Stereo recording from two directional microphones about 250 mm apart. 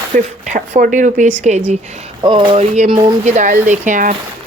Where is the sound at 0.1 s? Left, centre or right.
Right.